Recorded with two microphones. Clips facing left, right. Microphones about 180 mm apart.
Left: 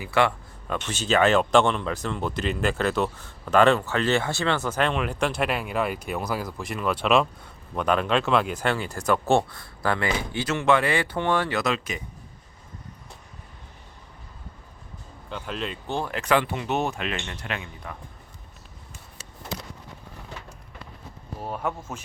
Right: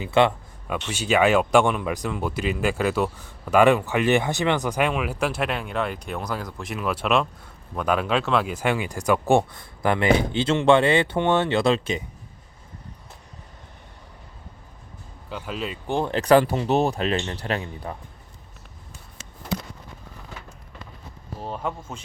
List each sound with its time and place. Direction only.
0.0 s speech: 20° right (ahead or behind)
0.9 s speech: 10° right (ahead or behind); by 12.0 s 30° right (ahead or behind)
15.3 s speech: 5° right (ahead or behind)
15.9 s speech: 15° right (ahead or behind)
16.1 s speech: 35° right (ahead or behind)
21.4 s speech: 5° left (ahead or behind)